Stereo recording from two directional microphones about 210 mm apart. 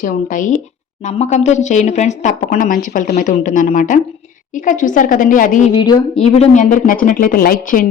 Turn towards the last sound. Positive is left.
turn(degrees=40)  # may be behind; listen again after turning